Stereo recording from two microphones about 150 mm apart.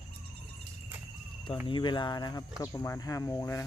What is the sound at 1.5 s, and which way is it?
Speech, 35° left (ahead or behind).